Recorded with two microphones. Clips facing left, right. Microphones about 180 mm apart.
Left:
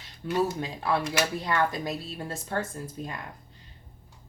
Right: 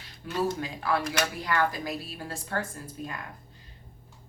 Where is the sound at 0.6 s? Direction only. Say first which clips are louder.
Left 1 dB; 25° left (ahead or behind).